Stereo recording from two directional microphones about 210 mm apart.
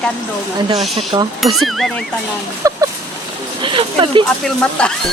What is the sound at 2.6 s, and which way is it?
Speech, 15° right (ahead or behind).